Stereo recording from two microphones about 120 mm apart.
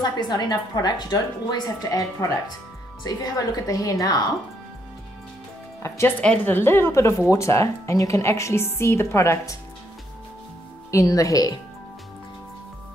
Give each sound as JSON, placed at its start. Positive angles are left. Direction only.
{"t": 0.0, "sound": "a woman's voice", "side_deg": 35}
{"t": 5.8, "sound": "speech", "side_deg": 25}
{"t": 10.9, "sound": "a woman's voice", "side_deg": 25}